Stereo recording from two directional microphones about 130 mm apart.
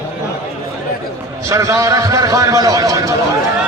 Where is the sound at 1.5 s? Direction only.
25° right (ahead or behind).